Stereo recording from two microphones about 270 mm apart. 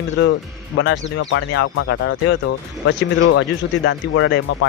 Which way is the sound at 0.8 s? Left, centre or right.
Left.